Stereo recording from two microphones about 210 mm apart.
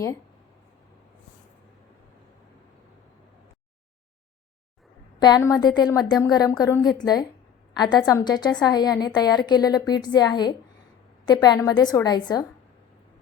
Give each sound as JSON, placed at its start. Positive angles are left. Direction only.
{"t": 5.2, "sound": "a woman's voice", "side_deg": 15}